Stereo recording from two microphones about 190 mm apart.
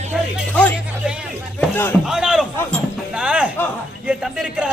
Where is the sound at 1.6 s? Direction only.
10° left (ahead or behind).